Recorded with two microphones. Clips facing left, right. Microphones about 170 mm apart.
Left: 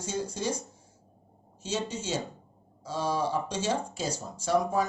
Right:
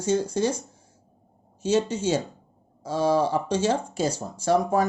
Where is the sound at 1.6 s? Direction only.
60° right (ahead or behind).